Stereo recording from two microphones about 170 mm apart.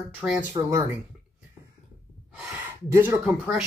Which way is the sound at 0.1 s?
5° right (ahead or behind).